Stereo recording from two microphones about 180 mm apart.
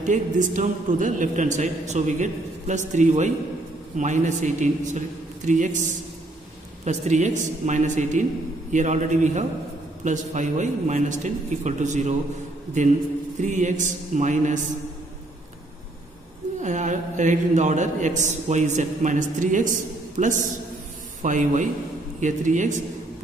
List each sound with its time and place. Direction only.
0.0 s a man's voice: 45° right (ahead or behind)
6.8 s a man's voice: 40° right (ahead or behind)
13.4 s a man's voice: 40° right (ahead or behind)
16.6 s a man's voice: 40° right (ahead or behind)